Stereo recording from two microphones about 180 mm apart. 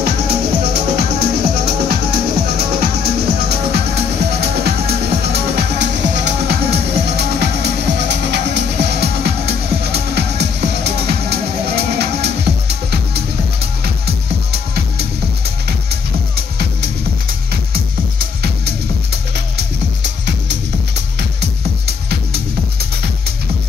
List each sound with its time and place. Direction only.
0.0 s music: 65° right (ahead or behind)
19.5 s music: 75° right (ahead or behind)
21.4 s music: 60° right (ahead or behind)